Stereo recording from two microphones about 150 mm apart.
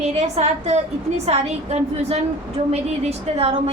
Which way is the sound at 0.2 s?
50° right (ahead or behind).